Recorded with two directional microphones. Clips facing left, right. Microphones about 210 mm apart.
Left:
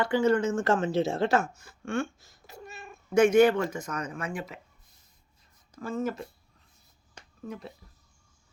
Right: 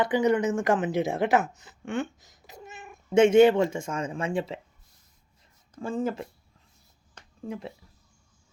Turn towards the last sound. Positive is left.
turn(degrees=-25)  # may be behind; listen again after turning